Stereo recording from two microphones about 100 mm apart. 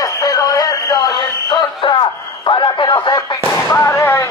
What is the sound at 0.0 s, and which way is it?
Music, 35° left (ahead or behind).